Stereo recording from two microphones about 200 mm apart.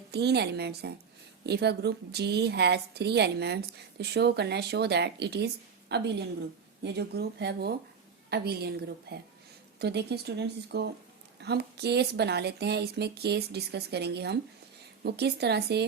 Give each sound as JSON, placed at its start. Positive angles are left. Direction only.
{"t": 0.1, "sound": "a woman's voice", "side_deg": -55}